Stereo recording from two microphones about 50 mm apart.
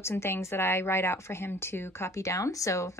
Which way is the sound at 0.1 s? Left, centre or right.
Left.